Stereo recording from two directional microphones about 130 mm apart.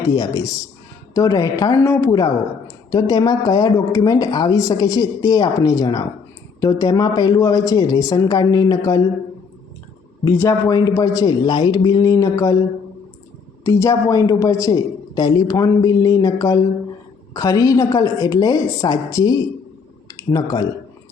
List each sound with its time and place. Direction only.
0.1 s speech: 30° left (ahead or behind)
10.2 s a man's voice: 15° left (ahead or behind)
10.7 s speech: 25° left (ahead or behind)
13.7 s speech: 20° left (ahead or behind)
20.1 s a sound: 30° left (ahead or behind)